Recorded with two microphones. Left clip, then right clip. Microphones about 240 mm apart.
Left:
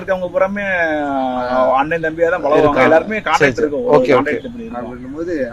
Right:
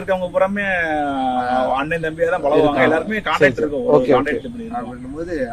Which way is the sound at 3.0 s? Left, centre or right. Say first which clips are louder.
Left 2 dB; centre.